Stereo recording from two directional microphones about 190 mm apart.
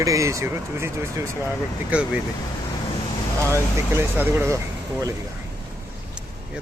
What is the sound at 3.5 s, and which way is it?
Speech, 10° right (ahead or behind).